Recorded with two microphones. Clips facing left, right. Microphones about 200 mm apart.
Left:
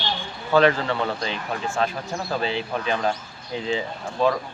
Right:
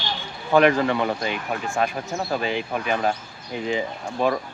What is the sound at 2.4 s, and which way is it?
Speech, 15° right (ahead or behind).